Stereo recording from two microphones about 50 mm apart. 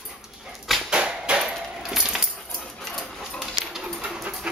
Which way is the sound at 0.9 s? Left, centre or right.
Right.